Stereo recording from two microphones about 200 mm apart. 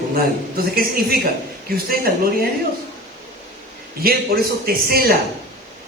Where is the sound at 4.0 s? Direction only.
50° right (ahead or behind).